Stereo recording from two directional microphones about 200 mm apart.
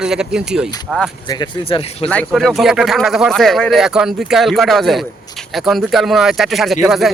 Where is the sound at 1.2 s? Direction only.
20° left (ahead or behind).